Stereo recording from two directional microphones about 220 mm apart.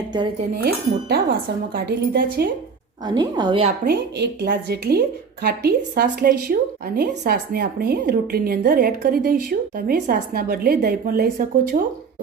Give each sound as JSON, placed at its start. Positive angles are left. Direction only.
{"t": 0.5, "sound": "a woman's voice", "side_deg": -45}
{"t": 3.0, "sound": "a woman's voice", "side_deg": -20}
{"t": 3.8, "sound": "a woman's voice", "side_deg": -45}